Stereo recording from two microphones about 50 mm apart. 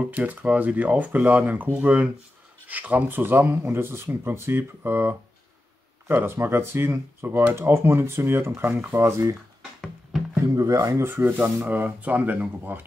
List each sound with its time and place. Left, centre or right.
0.1 s speech: right
8.9 s speech: right
10.8 s speech: right